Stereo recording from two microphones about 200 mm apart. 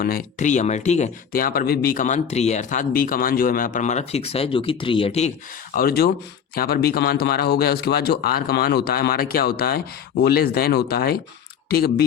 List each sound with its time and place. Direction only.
0.0 s speech: 40° left (ahead or behind)
5.7 s a man's voice: 50° left (ahead or behind)